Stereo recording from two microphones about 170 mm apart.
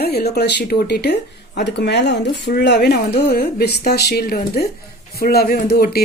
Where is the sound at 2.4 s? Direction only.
80° left.